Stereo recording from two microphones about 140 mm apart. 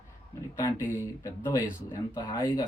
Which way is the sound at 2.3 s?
20° left (ahead or behind).